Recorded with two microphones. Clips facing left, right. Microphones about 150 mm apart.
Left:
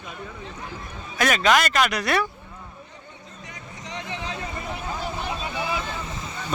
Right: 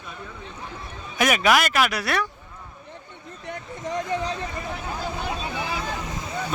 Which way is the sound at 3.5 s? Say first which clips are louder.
Right 9 dB; 55° right (ahead or behind).